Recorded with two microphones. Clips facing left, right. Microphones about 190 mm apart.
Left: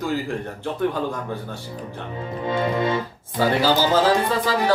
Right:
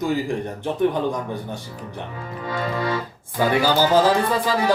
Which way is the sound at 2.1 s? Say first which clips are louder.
Left 5 dB; 25° left (ahead or behind).